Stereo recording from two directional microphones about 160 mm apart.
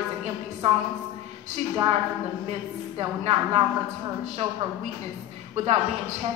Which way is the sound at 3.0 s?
35° right (ahead or behind).